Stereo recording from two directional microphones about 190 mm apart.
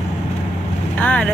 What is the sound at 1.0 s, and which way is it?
Speech, 5° left (ahead or behind).